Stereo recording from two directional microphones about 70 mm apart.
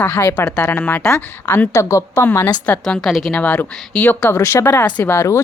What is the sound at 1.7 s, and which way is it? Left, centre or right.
Speech, left.